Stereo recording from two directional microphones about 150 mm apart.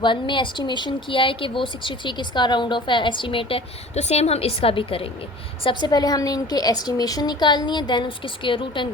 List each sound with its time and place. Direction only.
0.0 s a woman's voice: 30° left (ahead or behind)